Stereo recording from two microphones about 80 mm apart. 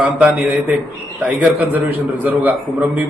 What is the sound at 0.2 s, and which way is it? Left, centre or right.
A man's voice, centre.